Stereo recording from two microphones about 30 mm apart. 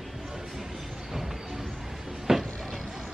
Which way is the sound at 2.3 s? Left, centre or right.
Centre.